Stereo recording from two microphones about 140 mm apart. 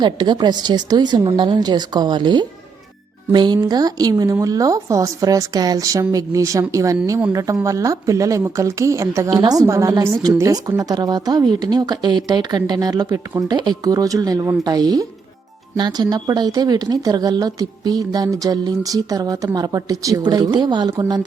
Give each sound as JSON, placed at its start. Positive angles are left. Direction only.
{"t": 0.0, "sound": "a woman's voice", "side_deg": -35}